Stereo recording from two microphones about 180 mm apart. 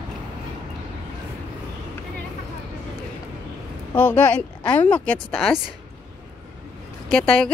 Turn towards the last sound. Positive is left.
turn(degrees=5)  # may be behind; listen again after turning